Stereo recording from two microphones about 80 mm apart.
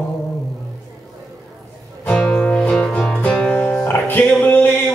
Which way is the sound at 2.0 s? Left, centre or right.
Centre.